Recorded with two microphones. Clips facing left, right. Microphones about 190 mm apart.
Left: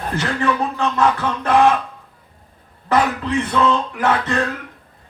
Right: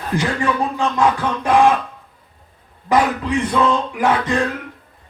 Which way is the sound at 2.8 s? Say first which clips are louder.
Right 1 dB; 15° right (ahead or behind).